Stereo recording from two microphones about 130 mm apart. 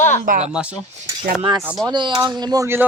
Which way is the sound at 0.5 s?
5° right (ahead or behind).